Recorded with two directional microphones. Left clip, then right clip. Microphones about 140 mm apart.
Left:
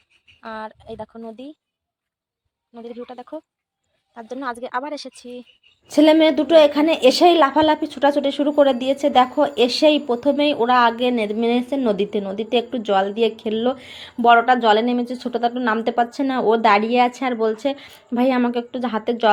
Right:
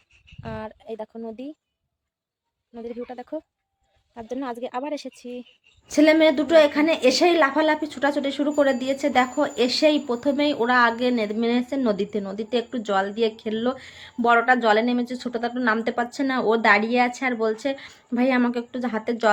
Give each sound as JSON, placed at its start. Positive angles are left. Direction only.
{"t": 0.4, "sound": "speech", "side_deg": -20}
{"t": 2.7, "sound": "speech", "side_deg": -20}
{"t": 5.9, "sound": "a woman's voice", "side_deg": 15}